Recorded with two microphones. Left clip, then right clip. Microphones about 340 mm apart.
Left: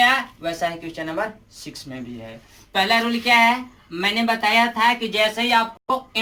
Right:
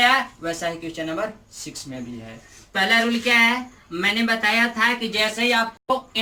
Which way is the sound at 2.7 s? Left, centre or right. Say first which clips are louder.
Even; centre.